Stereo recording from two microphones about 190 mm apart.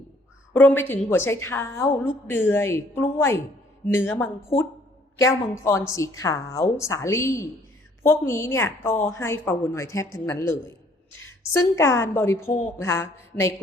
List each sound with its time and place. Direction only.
0.5 s a woman's voice: 10° left (ahead or behind)
11.8 s a woman's voice: 15° left (ahead or behind)